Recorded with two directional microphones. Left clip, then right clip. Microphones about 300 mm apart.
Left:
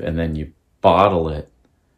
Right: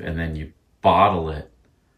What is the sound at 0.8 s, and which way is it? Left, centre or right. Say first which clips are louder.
Speech: left 2 dB; left.